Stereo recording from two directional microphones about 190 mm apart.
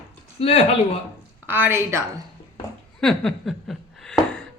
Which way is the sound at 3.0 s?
Centre (ahead or behind).